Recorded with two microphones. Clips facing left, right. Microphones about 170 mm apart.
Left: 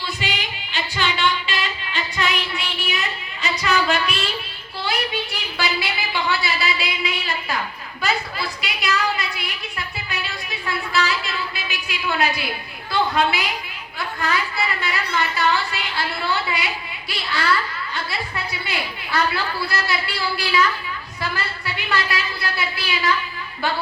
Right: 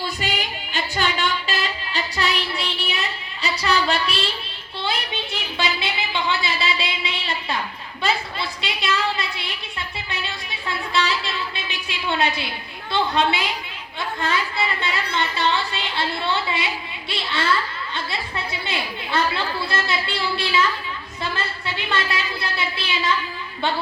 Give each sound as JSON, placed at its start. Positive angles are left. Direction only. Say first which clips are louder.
{"t": 0.2, "sound": "female singing", "louder": "right 2 dB", "side_deg": -45}
{"t": 3.4, "sound": "a woman's voice", "louder": "left 1 dB", "side_deg": -35}
{"t": 4.8, "sound": "a sound", "louder": "left 2 dB", "side_deg": -25}
{"t": 10.9, "sound": "a sound", "louder": "even", "side_deg": -25}
{"t": 12.9, "sound": "a woman's voice", "louder": "left 1 dB", "side_deg": -25}
{"t": 14.8, "sound": "a woman's voice", "louder": "left 1 dB", "side_deg": -25}